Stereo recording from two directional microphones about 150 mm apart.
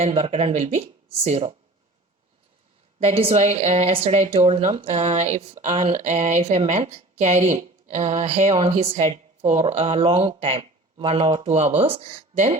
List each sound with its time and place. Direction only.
0.0 s speech: 45° right (ahead or behind)
3.0 s speech: 40° right (ahead or behind)